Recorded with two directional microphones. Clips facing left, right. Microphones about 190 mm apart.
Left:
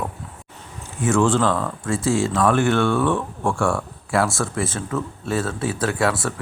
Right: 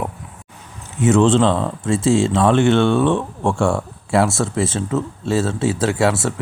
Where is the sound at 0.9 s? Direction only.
20° right (ahead or behind).